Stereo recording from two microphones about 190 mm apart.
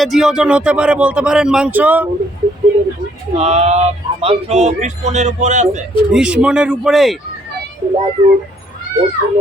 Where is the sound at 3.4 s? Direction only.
35° right (ahead or behind).